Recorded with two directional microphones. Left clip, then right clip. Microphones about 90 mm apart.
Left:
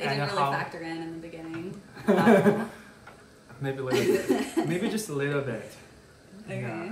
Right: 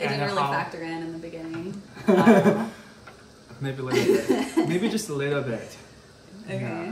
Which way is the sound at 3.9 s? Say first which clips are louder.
Right 3 dB; 50° right (ahead or behind).